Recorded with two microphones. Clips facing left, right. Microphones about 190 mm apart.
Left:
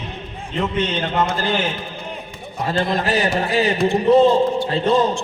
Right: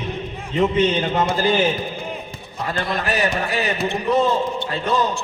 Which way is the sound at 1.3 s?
10° right (ahead or behind).